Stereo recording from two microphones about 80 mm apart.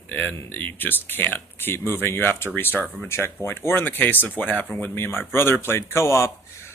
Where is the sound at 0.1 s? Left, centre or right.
Left.